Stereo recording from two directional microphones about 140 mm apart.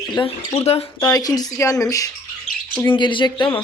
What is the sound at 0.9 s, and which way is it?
Speech, 25° left (ahead or behind).